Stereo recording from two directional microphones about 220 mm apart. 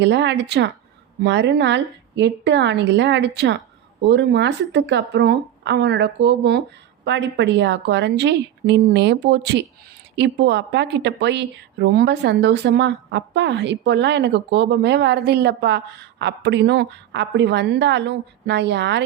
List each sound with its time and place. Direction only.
0.0 s a woman's voice: 55° right (ahead or behind)